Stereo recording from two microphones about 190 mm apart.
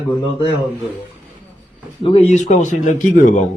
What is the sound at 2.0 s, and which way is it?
Speech, 30° left (ahead or behind).